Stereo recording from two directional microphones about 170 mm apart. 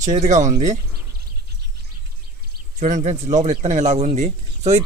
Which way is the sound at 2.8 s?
45° right (ahead or behind).